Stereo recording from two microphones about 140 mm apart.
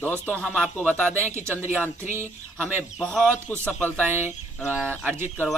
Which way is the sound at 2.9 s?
5° left (ahead or behind).